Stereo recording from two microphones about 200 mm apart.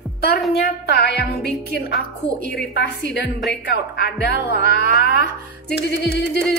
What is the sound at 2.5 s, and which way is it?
A woman's voice, 55° left (ahead or behind).